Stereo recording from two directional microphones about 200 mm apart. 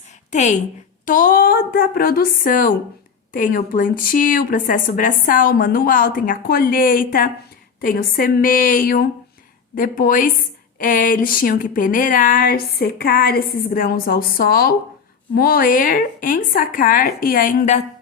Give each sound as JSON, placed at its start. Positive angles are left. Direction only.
{"t": 0.3, "sound": "a woman's voice", "side_deg": 35}